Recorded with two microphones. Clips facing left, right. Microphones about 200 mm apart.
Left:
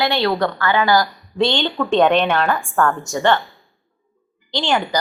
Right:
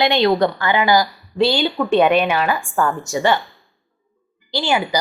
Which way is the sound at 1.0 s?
5° right (ahead or behind).